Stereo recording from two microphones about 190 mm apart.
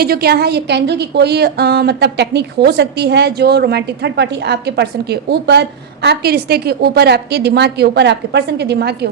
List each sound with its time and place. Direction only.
0.0 s a woman's voice: 55° right (ahead or behind)